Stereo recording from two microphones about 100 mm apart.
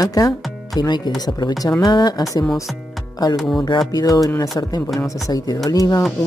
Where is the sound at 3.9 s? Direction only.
40° left (ahead or behind).